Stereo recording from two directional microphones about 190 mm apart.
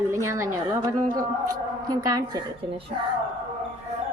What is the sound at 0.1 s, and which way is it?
A woman's voice, 15° right (ahead or behind).